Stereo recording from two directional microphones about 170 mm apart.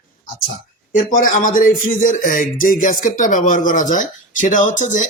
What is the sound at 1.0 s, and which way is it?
Speech, 50° left (ahead or behind).